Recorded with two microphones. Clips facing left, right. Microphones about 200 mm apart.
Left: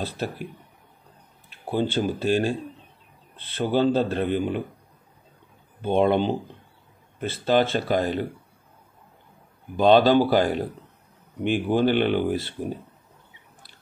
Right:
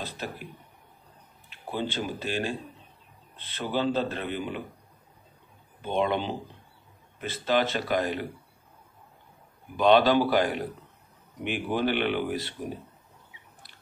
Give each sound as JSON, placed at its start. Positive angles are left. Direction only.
{"t": 1.7, "sound": "speech", "side_deg": 35}
{"t": 3.5, "sound": "speech", "side_deg": 35}
{"t": 5.8, "sound": "speech", "side_deg": 40}
{"t": 9.8, "sound": "speech", "side_deg": 35}